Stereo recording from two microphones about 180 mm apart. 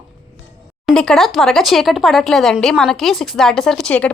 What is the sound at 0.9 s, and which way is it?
Speech, centre (ahead or behind).